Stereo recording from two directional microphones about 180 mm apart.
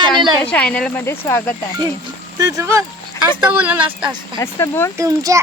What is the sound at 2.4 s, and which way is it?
Speech, 15° right (ahead or behind).